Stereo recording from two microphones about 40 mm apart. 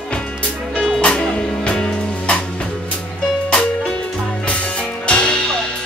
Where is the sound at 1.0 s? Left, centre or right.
Left.